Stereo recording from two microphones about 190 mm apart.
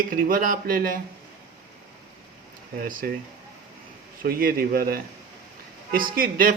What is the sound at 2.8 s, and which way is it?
Speech, 45° right (ahead or behind).